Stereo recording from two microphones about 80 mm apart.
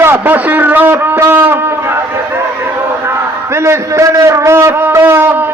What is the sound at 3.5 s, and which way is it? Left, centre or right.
A man's voice, right.